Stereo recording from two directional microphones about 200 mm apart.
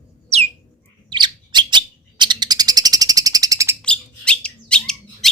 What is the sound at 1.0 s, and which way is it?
Bird, 20° right (ahead or behind).